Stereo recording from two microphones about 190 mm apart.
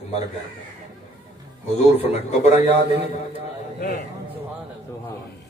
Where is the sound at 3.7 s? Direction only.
45° left (ahead or behind).